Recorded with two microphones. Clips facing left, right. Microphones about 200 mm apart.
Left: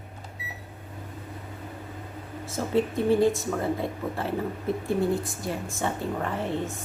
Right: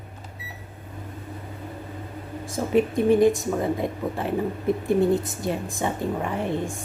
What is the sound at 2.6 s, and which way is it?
A woman's voice, 15° right (ahead or behind).